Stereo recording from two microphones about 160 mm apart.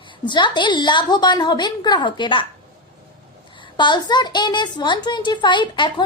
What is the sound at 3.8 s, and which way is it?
A woman's voice, 30° left (ahead or behind).